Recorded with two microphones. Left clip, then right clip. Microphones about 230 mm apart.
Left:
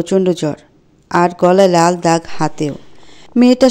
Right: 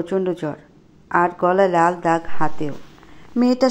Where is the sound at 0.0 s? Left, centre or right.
Left.